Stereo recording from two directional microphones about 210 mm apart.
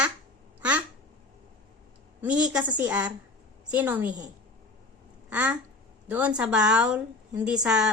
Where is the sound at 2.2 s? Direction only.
5° right (ahead or behind).